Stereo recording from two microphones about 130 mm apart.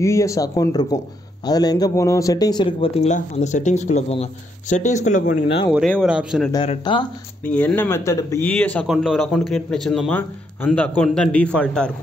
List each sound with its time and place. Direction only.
0.0 s speech: 20° left (ahead or behind)
2.9 s speech: 55° left (ahead or behind)
3.2 s speech: 65° left (ahead or behind); by 5.4 s 85° left
6.0 s speech: 5° right (ahead or behind)
6.8 s speech: 35° left (ahead or behind)
7.4 s a man's voice: 15° left (ahead or behind)
8.5 s a man's voice: 10° left (ahead or behind)
8.8 s a man's voice: centre (ahead or behind)
10.0 s a man's voice: 15° left (ahead or behind)